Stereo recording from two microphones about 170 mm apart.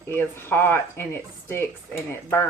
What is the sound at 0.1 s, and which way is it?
Speech, 10° left (ahead or behind).